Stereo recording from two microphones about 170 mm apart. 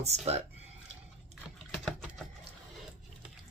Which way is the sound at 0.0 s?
40° right (ahead or behind).